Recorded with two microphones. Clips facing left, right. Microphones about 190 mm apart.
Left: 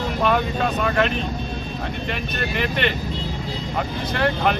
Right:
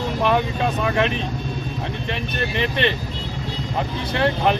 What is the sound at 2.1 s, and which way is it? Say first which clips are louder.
Speech: right 3 dB; 25° right (ahead or behind).